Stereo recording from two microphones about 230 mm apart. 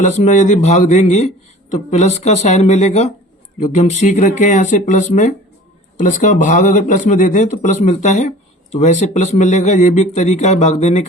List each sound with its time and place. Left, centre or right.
0.0 s speech: left